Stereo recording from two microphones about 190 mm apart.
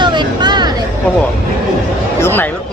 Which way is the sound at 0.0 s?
25° right (ahead or behind).